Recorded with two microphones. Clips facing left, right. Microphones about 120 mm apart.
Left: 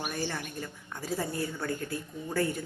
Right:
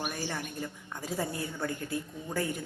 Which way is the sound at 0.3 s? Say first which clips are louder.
Even; 15° right (ahead or behind).